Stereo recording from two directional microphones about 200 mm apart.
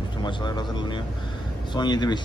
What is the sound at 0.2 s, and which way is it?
Speech, 20° left (ahead or behind).